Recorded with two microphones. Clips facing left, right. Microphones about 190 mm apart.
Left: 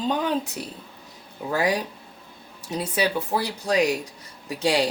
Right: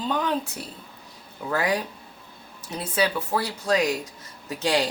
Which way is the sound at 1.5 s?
15° left (ahead or behind).